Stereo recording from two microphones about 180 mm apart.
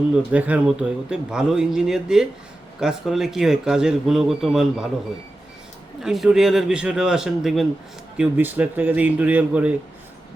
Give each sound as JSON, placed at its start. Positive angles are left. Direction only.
{"t": 0.3, "sound": "a man's voice", "side_deg": -10}
{"t": 6.0, "sound": "a man's voice", "side_deg": 0}